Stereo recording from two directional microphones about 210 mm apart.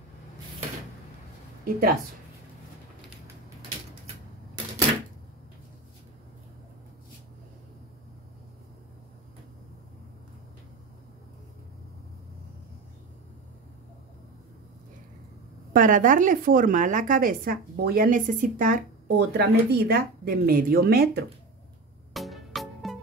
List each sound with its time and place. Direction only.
1.6 s a woman's voice: 45° right (ahead or behind)
15.7 s a woman's voice: 40° right (ahead or behind)
22.1 s music: centre (ahead or behind)